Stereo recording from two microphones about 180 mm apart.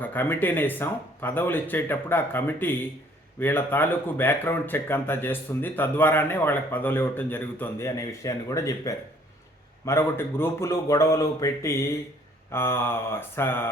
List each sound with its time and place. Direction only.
0.0 s speech: 10° left (ahead or behind)